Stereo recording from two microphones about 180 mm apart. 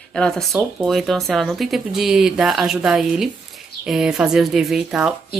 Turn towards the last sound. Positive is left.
turn(degrees=-5)  # may be behind; listen again after turning